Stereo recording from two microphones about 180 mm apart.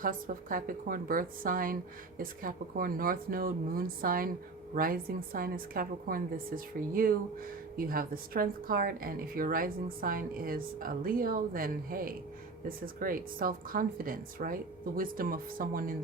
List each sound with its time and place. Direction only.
0.0 s speech: 50° right (ahead or behind)